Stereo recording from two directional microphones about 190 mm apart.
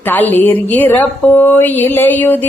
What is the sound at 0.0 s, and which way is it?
Speech, 10° left (ahead or behind).